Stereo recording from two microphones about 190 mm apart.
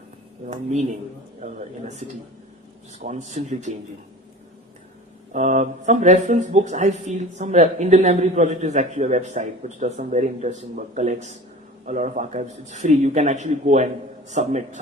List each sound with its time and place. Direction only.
0.5 s speech: 35° right (ahead or behind)
5.3 s speech: 40° right (ahead or behind)